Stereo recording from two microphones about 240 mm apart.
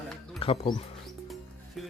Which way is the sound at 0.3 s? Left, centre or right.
Left.